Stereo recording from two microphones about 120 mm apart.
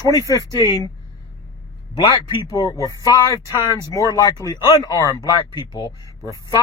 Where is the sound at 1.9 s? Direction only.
45° left (ahead or behind).